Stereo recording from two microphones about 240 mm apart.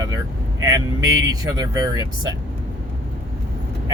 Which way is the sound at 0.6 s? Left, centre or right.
Centre.